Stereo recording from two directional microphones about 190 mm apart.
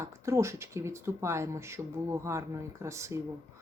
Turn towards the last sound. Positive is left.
turn(degrees=-15)  # may be behind; listen again after turning